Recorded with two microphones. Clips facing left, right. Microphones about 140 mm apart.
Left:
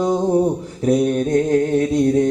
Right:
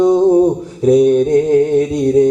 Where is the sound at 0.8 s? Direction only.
15° right (ahead or behind).